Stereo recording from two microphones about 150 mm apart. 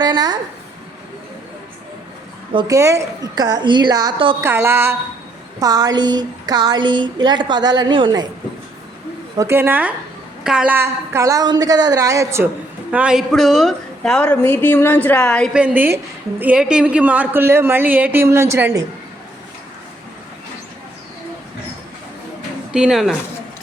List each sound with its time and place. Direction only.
0.0 s a woman's voice: 30° right (ahead or behind)
2.6 s a woman's voice: 20° right (ahead or behind)
4.4 s a woman's voice: 15° right (ahead or behind)
9.4 s a woman's voice: 15° right (ahead or behind)
12.9 s a woman's voice: 5° right (ahead or behind); by 15.4 s 10° left (ahead or behind)
15.5 s a woman's voice: 10° right (ahead or behind)
22.7 s speech: 5° right (ahead or behind)